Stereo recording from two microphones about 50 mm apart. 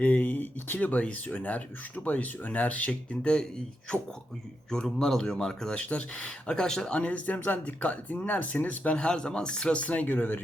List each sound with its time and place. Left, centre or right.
0.0 s speech: left; by 5.8 s centre
5.8 s speech: left; by 6.9 s centre
6.9 s speech: left
9.0 s speech: centre
10.1 s speech: left